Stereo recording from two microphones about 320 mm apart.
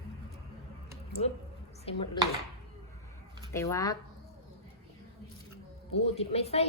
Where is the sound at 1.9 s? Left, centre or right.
Centre.